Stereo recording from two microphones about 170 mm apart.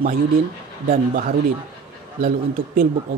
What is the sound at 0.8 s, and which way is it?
Speech, 50° right (ahead or behind).